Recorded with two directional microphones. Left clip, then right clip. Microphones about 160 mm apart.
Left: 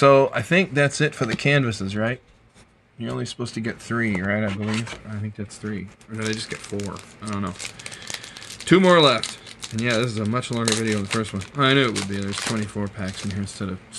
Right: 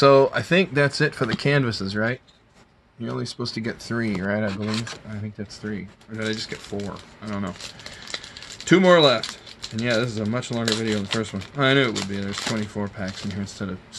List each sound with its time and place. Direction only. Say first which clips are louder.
0.0 s speech: even; 5° right (ahead or behind)
3.5 s speech: left 4 dB; 5° right (ahead or behind)
4.5 s speech: even; 15° right (ahead or behind)
5.7 s speech: left 1 dB; centre (ahead or behind)
8.6 s speech: even; centre (ahead or behind)